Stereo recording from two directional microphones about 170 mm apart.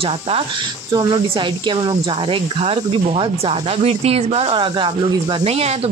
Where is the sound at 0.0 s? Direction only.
35° right (ahead or behind).